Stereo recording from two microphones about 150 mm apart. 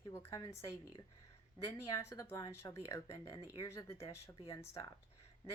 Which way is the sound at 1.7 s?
20° left (ahead or behind).